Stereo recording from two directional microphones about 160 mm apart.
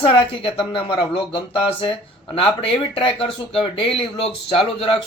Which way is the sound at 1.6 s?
35° left (ahead or behind).